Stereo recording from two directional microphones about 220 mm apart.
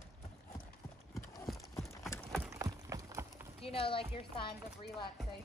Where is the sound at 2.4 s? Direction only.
15° right (ahead or behind).